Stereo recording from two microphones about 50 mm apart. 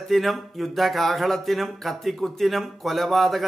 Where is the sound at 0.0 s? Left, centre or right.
Centre.